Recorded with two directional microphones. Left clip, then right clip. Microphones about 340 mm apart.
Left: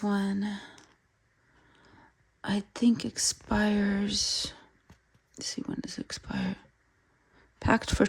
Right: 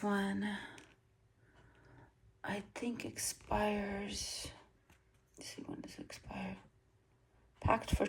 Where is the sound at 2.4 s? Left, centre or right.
Left.